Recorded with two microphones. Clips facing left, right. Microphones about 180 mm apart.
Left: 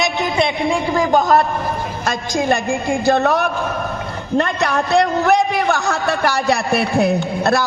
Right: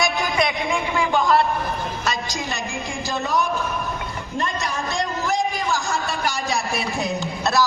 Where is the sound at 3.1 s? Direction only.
65° left (ahead or behind).